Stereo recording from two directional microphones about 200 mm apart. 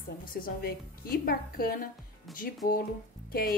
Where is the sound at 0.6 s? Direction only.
50° left (ahead or behind).